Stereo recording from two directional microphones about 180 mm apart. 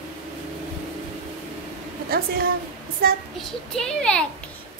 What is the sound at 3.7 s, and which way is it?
Speech, 5° left (ahead or behind).